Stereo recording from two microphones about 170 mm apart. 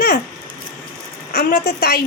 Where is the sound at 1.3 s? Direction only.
65° left (ahead or behind).